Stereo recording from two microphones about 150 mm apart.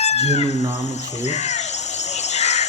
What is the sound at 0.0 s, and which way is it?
Chicken, 45° left (ahead or behind).